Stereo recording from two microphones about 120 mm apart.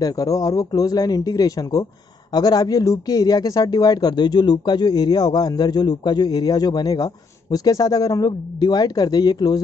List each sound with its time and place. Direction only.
0.0 s speech: 30° left (ahead or behind)